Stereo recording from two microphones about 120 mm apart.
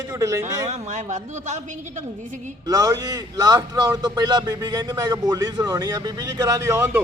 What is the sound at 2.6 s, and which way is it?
A man's voice, 30° right (ahead or behind).